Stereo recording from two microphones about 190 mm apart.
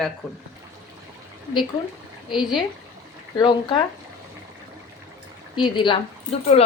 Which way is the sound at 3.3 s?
25° left (ahead or behind).